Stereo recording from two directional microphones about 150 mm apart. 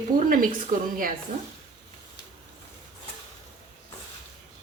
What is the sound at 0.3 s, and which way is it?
Speech, 70° right (ahead or behind).